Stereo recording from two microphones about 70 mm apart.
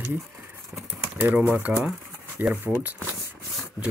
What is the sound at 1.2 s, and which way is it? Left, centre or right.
Speech, right.